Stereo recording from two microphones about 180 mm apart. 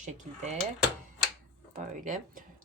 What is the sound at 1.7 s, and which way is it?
Speech, 45° right (ahead or behind).